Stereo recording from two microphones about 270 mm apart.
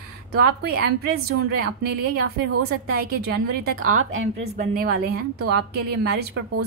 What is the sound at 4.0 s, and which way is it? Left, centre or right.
Speech, right.